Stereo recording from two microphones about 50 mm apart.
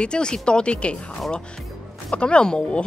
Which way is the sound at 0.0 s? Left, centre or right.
Centre.